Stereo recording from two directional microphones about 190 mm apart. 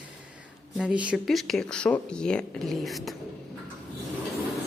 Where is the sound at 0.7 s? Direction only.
5° right (ahead or behind).